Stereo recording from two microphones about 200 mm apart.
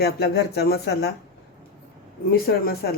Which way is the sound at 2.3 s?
50° left (ahead or behind).